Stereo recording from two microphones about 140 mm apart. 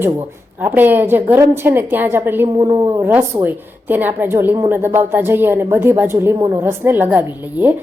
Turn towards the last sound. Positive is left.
turn(degrees=-10)  # may be behind; listen again after turning